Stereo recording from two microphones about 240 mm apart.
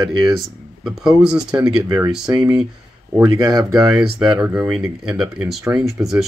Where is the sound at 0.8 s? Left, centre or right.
Centre.